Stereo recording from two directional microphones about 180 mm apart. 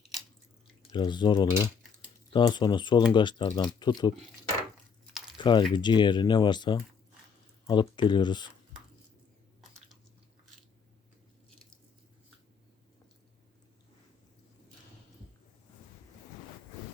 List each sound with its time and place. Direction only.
0.9 s speech: 25° left (ahead or behind)
5.4 s speech: 25° left (ahead or behind)